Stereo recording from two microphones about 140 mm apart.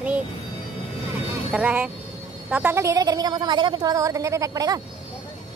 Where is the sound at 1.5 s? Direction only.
10° right (ahead or behind); by 4.8 s 25° right (ahead or behind).